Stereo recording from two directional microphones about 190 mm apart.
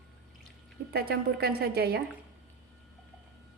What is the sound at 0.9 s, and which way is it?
A woman's voice, 55° right (ahead or behind).